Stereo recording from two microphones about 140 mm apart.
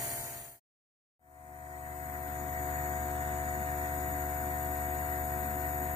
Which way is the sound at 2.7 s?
45° right (ahead or behind).